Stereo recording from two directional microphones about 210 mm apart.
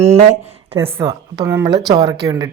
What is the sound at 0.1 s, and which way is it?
Speech, 30° right (ahead or behind).